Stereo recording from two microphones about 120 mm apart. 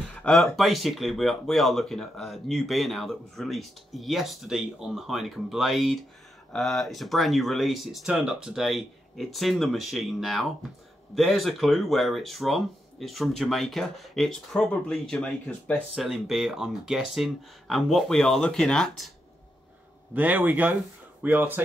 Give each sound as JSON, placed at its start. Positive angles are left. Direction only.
{"t": 0.2, "sound": "speech", "side_deg": 5}
{"t": 20.2, "sound": "speech", "side_deg": -15}